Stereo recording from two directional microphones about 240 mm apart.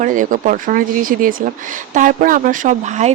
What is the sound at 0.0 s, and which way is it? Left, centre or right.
Speech, right.